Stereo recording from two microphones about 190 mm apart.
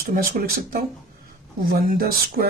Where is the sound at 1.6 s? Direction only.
50° right (ahead or behind).